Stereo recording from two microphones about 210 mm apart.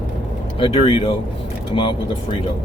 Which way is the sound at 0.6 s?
25° left (ahead or behind).